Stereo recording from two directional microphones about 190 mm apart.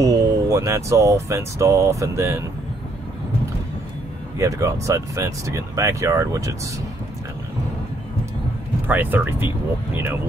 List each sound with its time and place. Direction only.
0.0 s speech: 15° right (ahead or behind)
4.4 s speech: 15° right (ahead or behind)
8.8 s speech: 10° right (ahead or behind)